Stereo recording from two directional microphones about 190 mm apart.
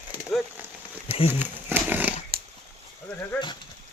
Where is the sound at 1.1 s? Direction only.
30° left (ahead or behind).